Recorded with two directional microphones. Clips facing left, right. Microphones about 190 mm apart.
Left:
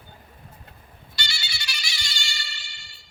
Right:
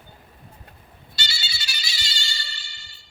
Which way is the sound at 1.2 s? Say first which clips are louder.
Even; 25° right (ahead or behind).